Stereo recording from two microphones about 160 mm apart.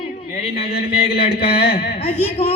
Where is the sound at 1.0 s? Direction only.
75° left (ahead or behind).